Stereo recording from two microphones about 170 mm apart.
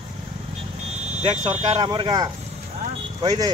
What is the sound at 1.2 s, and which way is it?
Speech, 35° right (ahead or behind).